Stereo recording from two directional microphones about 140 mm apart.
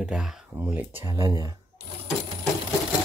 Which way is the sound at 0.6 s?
15° right (ahead or behind).